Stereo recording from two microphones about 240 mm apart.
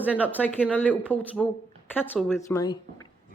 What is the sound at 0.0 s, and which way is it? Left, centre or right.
Speech, centre.